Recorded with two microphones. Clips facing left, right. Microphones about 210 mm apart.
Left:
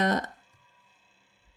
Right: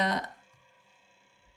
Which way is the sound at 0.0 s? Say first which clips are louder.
Left 4 dB; 45° left (ahead or behind).